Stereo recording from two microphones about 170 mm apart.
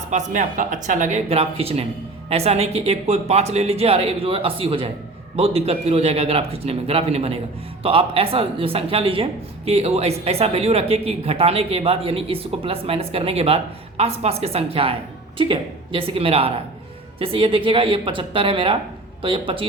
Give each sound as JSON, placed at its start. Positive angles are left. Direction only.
{"t": 0.1, "sound": "speech", "side_deg": -45}